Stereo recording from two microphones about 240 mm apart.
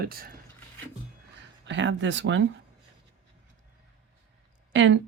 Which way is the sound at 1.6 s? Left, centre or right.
Right.